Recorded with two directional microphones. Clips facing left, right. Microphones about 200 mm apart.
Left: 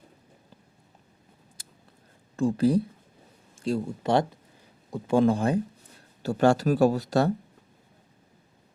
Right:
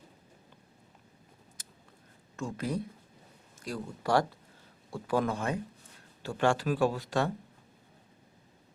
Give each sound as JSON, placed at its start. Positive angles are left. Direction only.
{"t": 2.3, "sound": "speech", "side_deg": 30}